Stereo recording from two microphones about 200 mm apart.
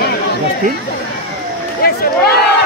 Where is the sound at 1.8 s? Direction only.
50° left (ahead or behind).